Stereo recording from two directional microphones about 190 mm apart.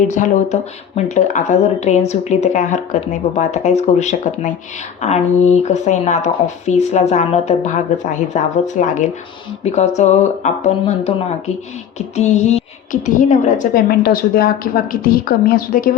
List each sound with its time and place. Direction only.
0.1 s a woman's voice: 40° left (ahead or behind)